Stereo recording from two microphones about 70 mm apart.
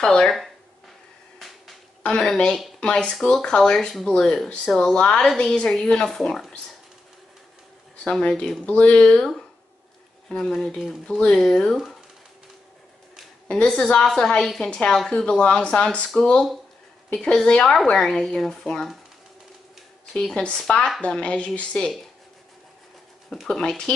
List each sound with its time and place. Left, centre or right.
0.0 s speech: centre
2.0 s speech: centre
8.0 s speech: centre
10.3 s speech: centre
11.1 s speech: centre
11.7 s speech: centre
13.5 s speech: centre
17.1 s speech: centre
20.1 s speech: centre
23.4 s speech: centre